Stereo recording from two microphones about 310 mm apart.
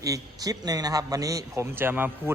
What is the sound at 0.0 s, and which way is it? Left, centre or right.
A man's voice, centre.